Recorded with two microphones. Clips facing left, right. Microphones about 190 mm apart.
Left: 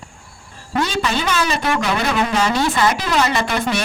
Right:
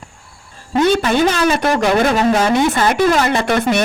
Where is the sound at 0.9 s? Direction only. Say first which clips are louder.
Right 7 dB; 55° right (ahead or behind).